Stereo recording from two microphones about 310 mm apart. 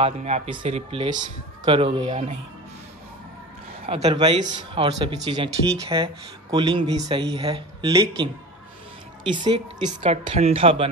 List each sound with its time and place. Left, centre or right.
0.0 s a man's voice: centre
3.8 s speech: centre
9.3 s speech: centre